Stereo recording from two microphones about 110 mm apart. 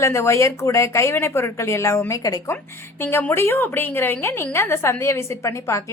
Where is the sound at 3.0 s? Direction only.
20° left (ahead or behind).